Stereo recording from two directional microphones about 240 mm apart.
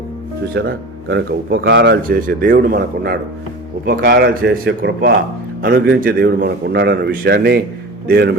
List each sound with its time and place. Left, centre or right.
0.5 s speech: right